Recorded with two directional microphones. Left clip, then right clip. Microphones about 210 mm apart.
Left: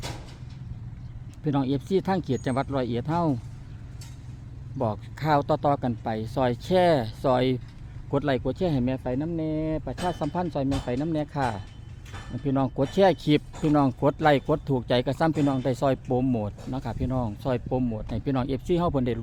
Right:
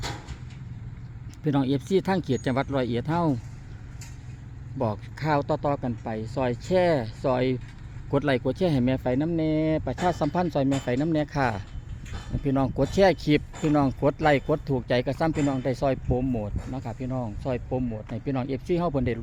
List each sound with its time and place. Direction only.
1.5 s speech: 5° right (ahead or behind)
4.8 s speech: centre (ahead or behind)
8.1 s speech: 5° right (ahead or behind)